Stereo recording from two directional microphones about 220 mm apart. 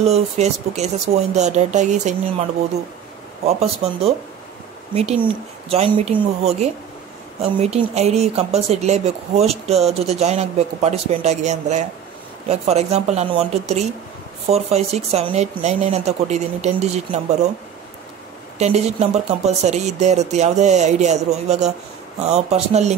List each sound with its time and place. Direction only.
0.0 s speech: 30° right (ahead or behind)
3.4 s speech: 30° right (ahead or behind)
5.7 s speech: 25° right (ahead or behind)
18.6 s speech: 30° right (ahead or behind)